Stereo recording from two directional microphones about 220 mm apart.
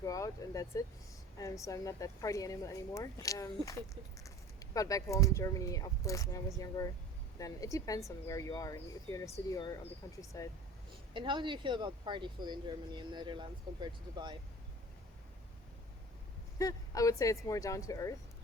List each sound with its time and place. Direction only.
0.0 s speech: 15° left (ahead or behind)
11.1 s speech: 20° right (ahead or behind)
16.6 s speech: 15° left (ahead or behind)